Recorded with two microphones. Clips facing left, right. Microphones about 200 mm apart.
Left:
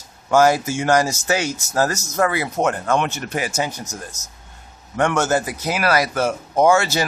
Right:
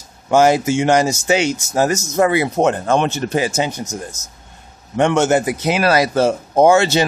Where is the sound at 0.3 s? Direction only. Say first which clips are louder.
Right 3 dB; 20° right (ahead or behind).